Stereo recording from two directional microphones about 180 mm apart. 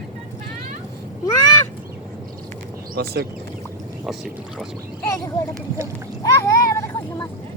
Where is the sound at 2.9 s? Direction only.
60° right (ahead or behind).